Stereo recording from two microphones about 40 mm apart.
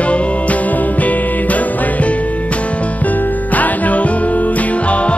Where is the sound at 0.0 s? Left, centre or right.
Left.